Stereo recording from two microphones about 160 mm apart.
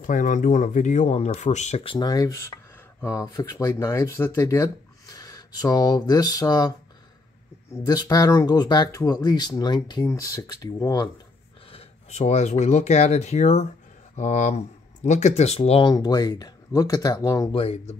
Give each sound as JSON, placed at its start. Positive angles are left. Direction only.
{"t": 0.0, "sound": "speech", "side_deg": 55}
{"t": 7.7, "sound": "speech", "side_deg": 25}
{"t": 11.7, "sound": "speech", "side_deg": 45}
{"t": 15.9, "sound": "speech", "side_deg": 25}
{"t": 17.5, "sound": "speech", "side_deg": 35}